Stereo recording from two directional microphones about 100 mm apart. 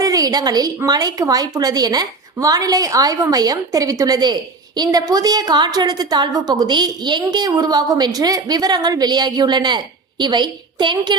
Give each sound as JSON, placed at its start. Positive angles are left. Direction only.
{"t": 0.0, "sound": "a woman's voice", "side_deg": -35}